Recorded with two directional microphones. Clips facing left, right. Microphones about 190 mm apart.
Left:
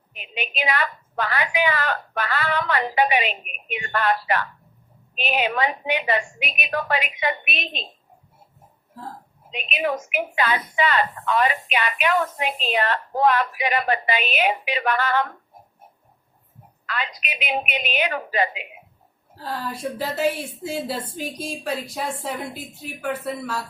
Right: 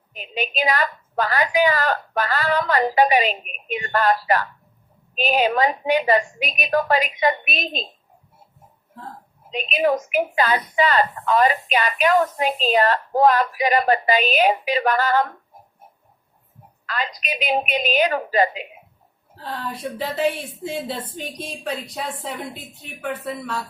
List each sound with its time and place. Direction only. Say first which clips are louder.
0.1 s a woman's voice: right 5 dB; 40° right (ahead or behind)
9.5 s a woman's voice: right 5 dB; 40° right (ahead or behind)
16.8 s a woman's voice: right 2 dB; 40° right (ahead or behind)
19.4 s a woman's voice: left 1 dB; centre (ahead or behind)